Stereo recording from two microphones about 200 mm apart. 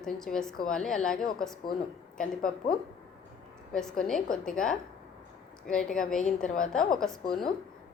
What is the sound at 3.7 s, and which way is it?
A woman's voice, 5° left (ahead or behind).